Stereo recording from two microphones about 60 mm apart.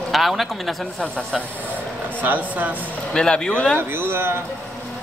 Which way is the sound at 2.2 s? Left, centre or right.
Right.